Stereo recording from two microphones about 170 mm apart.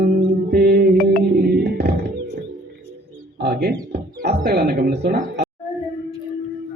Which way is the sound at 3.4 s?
80° right.